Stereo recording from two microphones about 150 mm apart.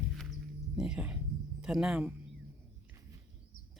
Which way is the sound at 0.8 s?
5° right (ahead or behind).